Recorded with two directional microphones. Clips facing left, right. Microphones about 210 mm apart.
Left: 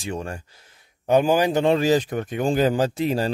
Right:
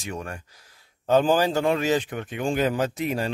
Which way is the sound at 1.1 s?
15° left (ahead or behind).